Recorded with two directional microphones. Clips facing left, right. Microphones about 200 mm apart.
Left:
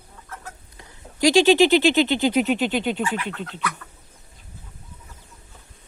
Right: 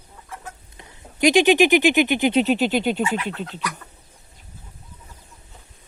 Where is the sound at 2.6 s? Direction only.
5° right (ahead or behind).